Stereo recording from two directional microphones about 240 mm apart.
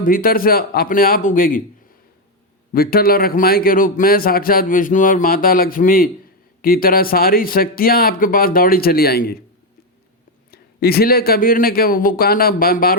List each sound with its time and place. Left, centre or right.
0.0 s a man's voice: left
2.7 s a man's voice: left
10.5 s a man's voice: left